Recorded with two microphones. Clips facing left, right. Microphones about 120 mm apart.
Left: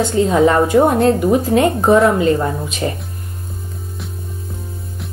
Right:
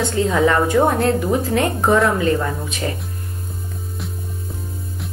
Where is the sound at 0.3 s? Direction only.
25° left (ahead or behind).